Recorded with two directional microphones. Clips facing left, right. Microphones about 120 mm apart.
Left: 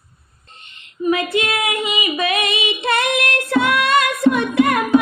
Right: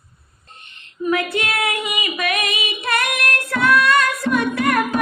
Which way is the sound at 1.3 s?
20° left (ahead or behind).